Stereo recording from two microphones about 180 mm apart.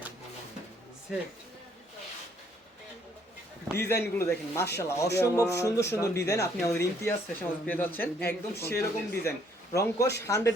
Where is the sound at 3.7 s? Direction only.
15° left (ahead or behind).